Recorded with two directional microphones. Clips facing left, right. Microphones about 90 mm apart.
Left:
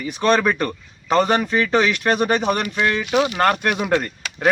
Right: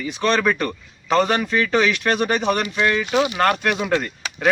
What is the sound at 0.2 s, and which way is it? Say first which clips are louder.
Speech: left 2 dB; 15° left (ahead or behind).